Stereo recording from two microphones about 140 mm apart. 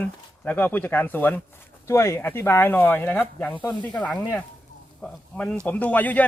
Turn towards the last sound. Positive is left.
turn(degrees=10)  # may be behind; listen again after turning